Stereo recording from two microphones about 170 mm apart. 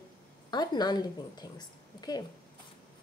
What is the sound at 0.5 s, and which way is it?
A woman's voice, 25° left (ahead or behind).